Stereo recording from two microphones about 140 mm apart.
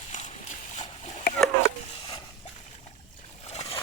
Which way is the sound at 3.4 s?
45° left (ahead or behind).